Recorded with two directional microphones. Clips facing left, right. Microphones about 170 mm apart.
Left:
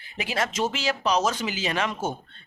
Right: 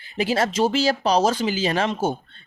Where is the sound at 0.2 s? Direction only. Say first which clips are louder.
Right 6 dB; 30° right (ahead or behind).